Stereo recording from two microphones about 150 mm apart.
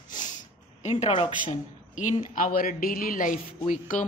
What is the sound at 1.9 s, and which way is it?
A woman's voice, 55° left (ahead or behind).